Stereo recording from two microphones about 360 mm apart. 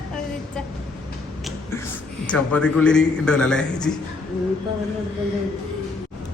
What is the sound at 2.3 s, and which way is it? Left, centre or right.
A man's voice, centre.